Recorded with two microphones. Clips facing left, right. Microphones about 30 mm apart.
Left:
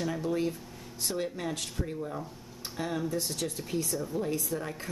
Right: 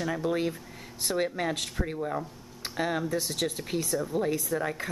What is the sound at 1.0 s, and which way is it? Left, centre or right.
Speech, right.